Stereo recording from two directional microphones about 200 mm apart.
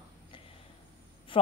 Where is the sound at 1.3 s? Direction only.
25° left (ahead or behind).